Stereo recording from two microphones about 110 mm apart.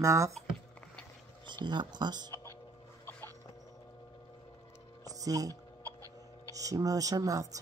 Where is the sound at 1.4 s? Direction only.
45° right (ahead or behind).